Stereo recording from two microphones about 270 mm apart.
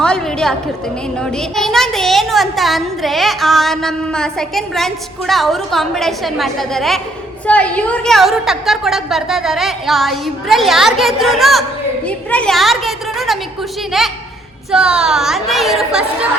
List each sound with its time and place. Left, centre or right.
0.0 s a woman's voice: centre